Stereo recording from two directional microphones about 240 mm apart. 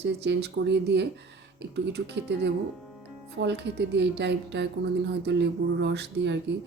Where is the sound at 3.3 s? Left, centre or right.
Right.